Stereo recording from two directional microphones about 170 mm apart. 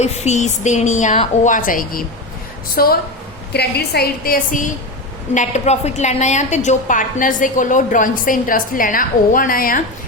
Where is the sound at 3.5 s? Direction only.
70° left (ahead or behind).